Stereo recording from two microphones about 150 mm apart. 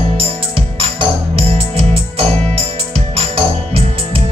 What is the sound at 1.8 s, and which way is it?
Music, 40° right (ahead or behind).